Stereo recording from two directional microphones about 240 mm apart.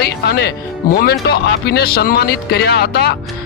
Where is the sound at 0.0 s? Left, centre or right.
Left.